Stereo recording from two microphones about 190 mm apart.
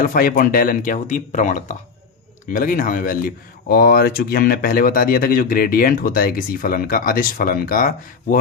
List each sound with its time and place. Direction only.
0.0 s speech: 50° left (ahead or behind)